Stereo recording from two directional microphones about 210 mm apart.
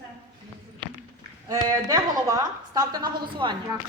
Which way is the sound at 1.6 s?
15° right (ahead or behind).